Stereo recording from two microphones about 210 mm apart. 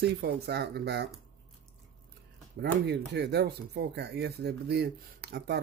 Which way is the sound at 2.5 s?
50° right (ahead or behind).